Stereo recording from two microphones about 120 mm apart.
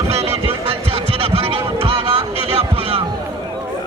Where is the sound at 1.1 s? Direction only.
55° right (ahead or behind).